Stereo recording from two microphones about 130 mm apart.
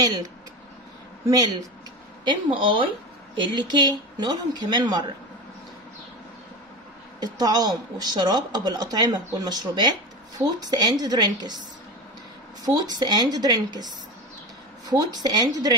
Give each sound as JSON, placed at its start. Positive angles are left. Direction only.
{"t": 0.0, "sound": "speech", "side_deg": -30}
{"t": 2.2, "sound": "speech", "side_deg": -40}
{"t": 7.2, "sound": "speech", "side_deg": -30}
{"t": 12.6, "sound": "speech", "side_deg": -30}
{"t": 14.9, "sound": "speech", "side_deg": -30}